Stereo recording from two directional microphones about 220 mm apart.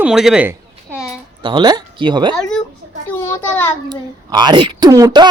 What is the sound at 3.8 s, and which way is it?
A child's voice, 20° right (ahead or behind).